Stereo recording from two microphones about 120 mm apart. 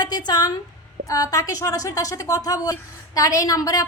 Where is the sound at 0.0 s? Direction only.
35° left (ahead or behind).